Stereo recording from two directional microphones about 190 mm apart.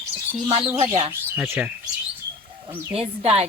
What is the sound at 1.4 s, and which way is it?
Speech, 10° right (ahead or behind).